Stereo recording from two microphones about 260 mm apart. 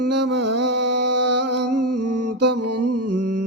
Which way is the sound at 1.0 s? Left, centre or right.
Right.